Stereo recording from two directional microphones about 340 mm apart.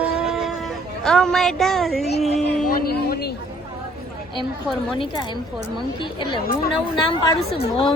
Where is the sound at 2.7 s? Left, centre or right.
Left.